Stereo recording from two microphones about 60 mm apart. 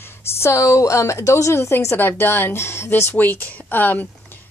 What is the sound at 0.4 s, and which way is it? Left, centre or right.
Speech, left.